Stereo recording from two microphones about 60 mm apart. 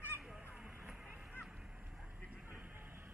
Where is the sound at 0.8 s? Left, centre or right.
Centre.